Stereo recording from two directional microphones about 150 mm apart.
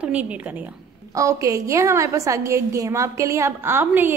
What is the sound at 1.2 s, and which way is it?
A woman's voice, 20° right (ahead or behind).